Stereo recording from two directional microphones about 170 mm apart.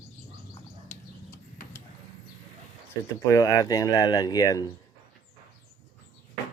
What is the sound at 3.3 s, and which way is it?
Speech, 20° left (ahead or behind).